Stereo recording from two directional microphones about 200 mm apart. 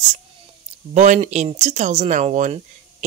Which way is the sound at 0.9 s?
35° right (ahead or behind).